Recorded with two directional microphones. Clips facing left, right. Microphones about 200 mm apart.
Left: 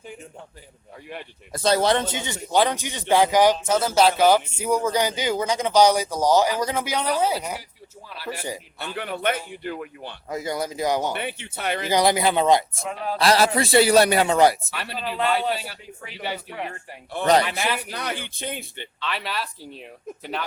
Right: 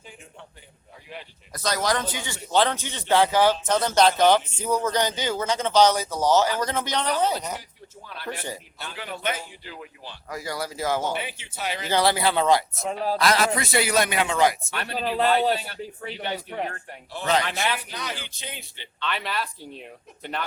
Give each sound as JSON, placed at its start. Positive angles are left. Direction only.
{"t": 1.5, "sound": "speech", "side_deg": 30}
{"t": 9.0, "sound": "a man's voice", "side_deg": 60}
{"t": 10.2, "sound": "speech", "side_deg": 20}
{"t": 11.2, "sound": "a man's voice", "side_deg": 60}
{"t": 11.9, "sound": "speech", "side_deg": 15}
{"t": 12.9, "sound": "speech", "side_deg": -35}
{"t": 13.1, "sound": "a man's voice", "side_deg": 30}
{"t": 14.7, "sound": "speech", "side_deg": 0}
{"t": 14.9, "sound": "speech", "side_deg": -40}
{"t": 15.5, "sound": "speech", "side_deg": 5}
{"t": 15.8, "sound": "speech", "side_deg": -35}
{"t": 17.4, "sound": "speech", "side_deg": 5}
{"t": 17.9, "sound": "a man's voice", "side_deg": 55}
{"t": 18.9, "sound": "speech", "side_deg": 0}